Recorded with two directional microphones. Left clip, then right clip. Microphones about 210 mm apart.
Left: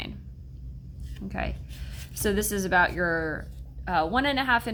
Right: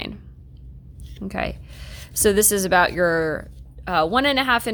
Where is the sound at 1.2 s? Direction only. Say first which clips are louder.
Right 7 dB; 45° right (ahead or behind).